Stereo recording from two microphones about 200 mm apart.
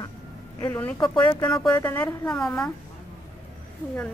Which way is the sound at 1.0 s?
25° left (ahead or behind).